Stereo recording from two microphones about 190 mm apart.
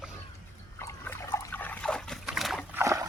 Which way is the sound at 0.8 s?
15° left (ahead or behind).